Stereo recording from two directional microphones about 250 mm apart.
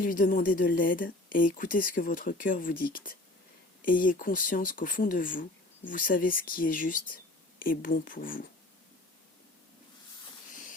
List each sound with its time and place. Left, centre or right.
0.0 s speech: left